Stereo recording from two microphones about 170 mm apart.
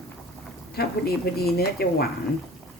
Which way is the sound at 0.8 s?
65° left (ahead or behind).